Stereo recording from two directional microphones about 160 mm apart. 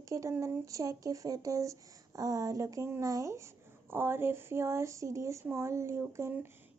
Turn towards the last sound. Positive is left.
turn(degrees=-15)  # may be behind; listen again after turning